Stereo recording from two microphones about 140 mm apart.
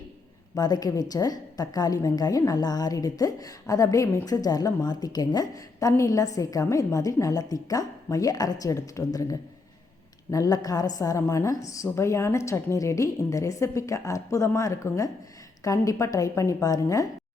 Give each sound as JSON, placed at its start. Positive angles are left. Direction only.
{"t": 0.5, "sound": "a woman's voice", "side_deg": 25}